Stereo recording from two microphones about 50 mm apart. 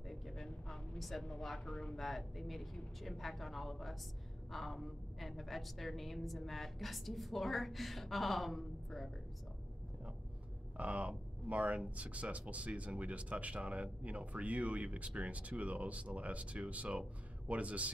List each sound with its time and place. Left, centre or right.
0.1 s a sound: centre
1.2 s a woman's voice: centre
10.8 s speech: right